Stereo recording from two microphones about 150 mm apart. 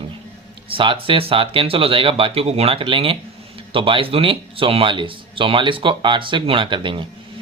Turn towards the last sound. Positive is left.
turn(degrees=-35)  # may be behind; listen again after turning